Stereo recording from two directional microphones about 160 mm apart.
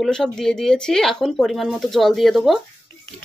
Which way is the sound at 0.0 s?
5° left (ahead or behind).